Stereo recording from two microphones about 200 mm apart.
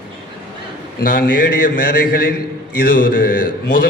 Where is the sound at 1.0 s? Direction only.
45° left (ahead or behind).